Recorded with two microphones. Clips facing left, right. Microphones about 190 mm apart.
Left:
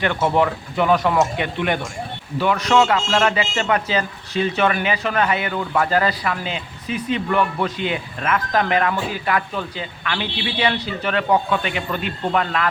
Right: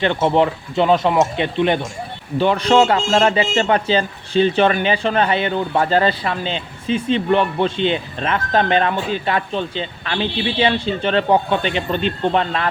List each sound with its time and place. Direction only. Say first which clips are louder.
0.0 s a man's voice: right 3 dB; 25° right (ahead or behind)